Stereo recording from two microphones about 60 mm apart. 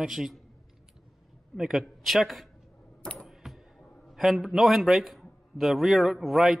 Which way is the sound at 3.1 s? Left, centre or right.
Centre.